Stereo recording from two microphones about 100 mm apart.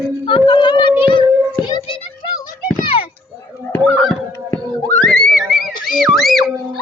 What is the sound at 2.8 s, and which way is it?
Children playing, 65° left (ahead or behind).